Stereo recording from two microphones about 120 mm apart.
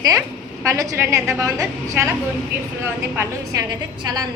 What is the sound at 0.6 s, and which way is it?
Speech, 25° right (ahead or behind).